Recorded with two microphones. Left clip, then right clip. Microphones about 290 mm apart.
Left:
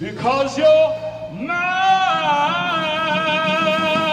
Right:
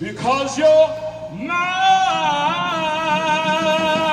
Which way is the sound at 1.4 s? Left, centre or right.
Left.